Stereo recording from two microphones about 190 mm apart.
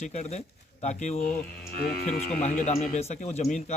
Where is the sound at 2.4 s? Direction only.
40° left (ahead or behind).